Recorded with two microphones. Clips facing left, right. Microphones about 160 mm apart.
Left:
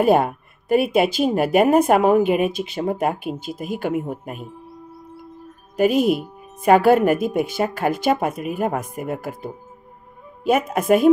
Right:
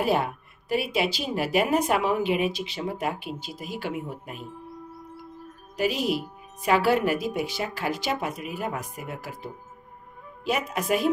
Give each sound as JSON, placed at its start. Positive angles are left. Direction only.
{"t": 0.0, "sound": "speech", "side_deg": 50}
{"t": 5.8, "sound": "speech", "side_deg": 50}